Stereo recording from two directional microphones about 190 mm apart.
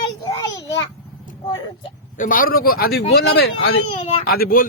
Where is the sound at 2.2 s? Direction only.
45° left (ahead or behind).